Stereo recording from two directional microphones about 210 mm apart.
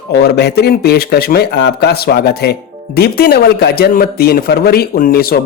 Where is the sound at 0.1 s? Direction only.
50° left (ahead or behind).